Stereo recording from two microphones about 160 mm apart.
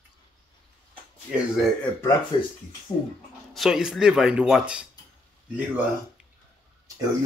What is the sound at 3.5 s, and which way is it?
Speech, centre (ahead or behind).